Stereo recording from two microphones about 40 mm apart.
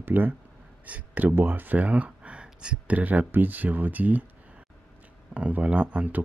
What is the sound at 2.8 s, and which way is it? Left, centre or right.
Speech, right.